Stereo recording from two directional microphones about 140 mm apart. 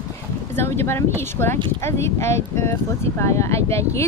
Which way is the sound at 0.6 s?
15° left (ahead or behind).